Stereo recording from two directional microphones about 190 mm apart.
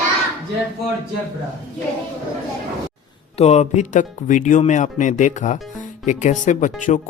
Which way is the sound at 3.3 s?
35° left (ahead or behind).